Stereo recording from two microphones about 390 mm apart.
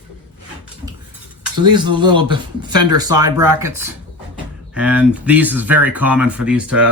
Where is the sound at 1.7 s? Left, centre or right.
Centre.